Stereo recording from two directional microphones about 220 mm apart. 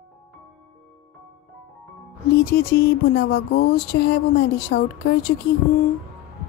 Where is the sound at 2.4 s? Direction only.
45° left (ahead or behind).